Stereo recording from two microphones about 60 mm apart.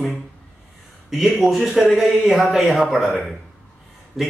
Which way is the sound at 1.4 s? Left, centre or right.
Centre.